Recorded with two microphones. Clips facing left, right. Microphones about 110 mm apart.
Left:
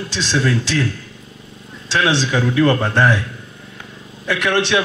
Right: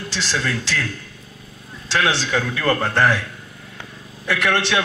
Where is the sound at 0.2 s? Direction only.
25° left (ahead or behind).